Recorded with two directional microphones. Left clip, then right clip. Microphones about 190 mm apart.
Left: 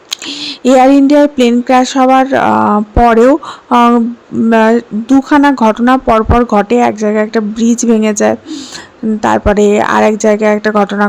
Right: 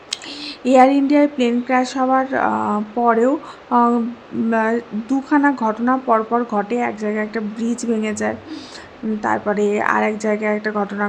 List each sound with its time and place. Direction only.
0.1 s speech: 45° left (ahead or behind)